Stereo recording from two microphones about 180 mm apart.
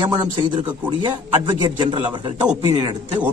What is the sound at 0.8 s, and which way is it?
Speech, 25° right (ahead or behind).